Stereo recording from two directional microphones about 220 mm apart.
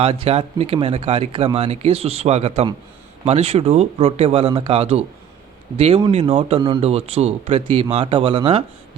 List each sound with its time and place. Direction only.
0.0 s speech: 25° right (ahead or behind)